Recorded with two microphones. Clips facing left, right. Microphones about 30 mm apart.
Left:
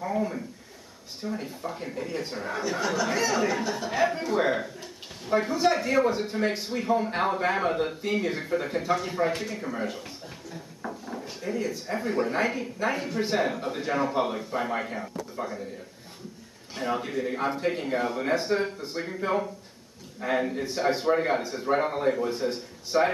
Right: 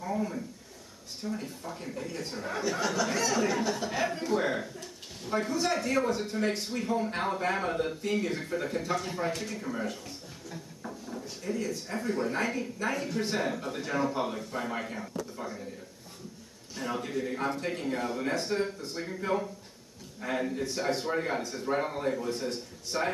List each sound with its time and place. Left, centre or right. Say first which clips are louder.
0.0 s a sound: left 4 dB; left
1.2 s speech: left 4 dB; centre
16.7 s speech: left 4 dB; left